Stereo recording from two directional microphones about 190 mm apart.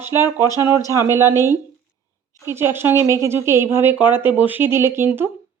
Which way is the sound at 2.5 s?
10° right (ahead or behind).